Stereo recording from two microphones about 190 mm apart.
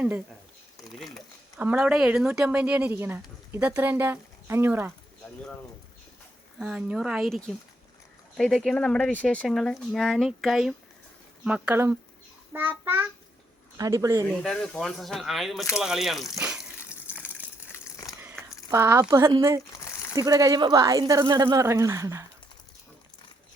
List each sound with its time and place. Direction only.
0.9 s speech: 20° left (ahead or behind)
1.5 s speech: 10° right (ahead or behind)
6.6 s speech: 5° right (ahead or behind)
14.4 s speech: 5° left (ahead or behind)
16.3 s water: 5° right (ahead or behind)
16.7 s gush: 15° left (ahead or behind)
18.2 s speech: 10° right (ahead or behind)
19.8 s a sound: 15° left (ahead or behind)
20.1 s speech: 20° right (ahead or behind)